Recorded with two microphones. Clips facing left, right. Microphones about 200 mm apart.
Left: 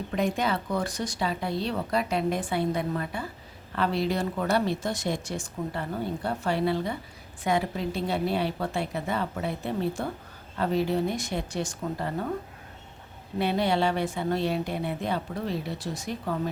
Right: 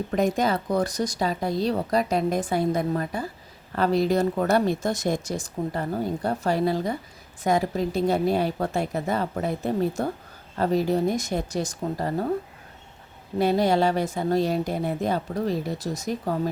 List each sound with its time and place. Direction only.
0.1 s a woman's voice: 45° right (ahead or behind)
13.4 s speech: 40° right (ahead or behind)